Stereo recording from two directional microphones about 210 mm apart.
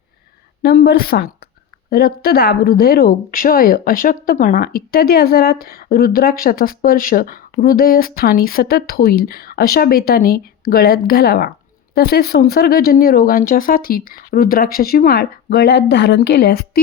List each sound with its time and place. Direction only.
0.6 s speech: 50° left (ahead or behind)